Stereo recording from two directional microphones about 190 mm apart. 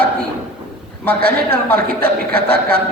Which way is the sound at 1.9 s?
55° right (ahead or behind).